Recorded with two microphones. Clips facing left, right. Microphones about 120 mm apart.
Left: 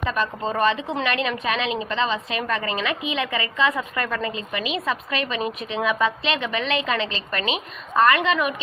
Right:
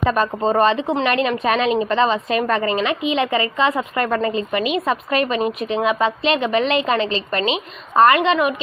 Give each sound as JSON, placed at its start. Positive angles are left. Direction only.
{"t": 0.0, "sound": "speech", "side_deg": -40}